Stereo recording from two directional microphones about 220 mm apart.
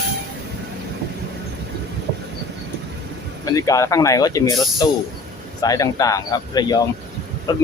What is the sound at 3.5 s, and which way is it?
Speech, 15° left (ahead or behind).